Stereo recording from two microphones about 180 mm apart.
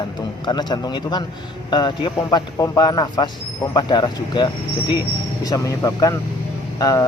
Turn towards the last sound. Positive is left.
turn(degrees=20)  # may be behind; listen again after turning